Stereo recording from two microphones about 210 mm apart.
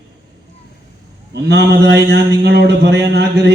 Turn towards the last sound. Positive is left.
turn(degrees=-50)  # may be behind; listen again after turning